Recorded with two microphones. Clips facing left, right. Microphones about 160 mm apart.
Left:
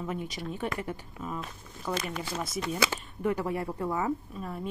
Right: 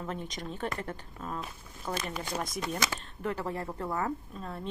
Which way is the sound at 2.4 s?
Centre (ahead or behind).